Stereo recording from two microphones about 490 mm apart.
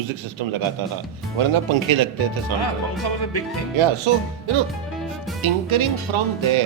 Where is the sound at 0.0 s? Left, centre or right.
Right.